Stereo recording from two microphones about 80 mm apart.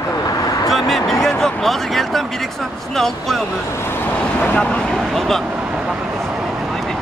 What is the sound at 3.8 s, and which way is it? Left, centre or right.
Vehicle, left.